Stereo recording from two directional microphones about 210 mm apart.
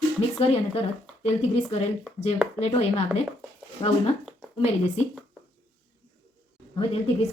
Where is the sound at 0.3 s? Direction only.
30° left (ahead or behind).